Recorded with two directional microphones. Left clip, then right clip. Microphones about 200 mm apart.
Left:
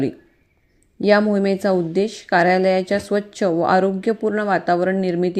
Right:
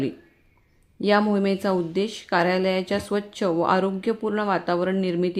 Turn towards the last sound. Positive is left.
turn(degrees=15)  # may be behind; listen again after turning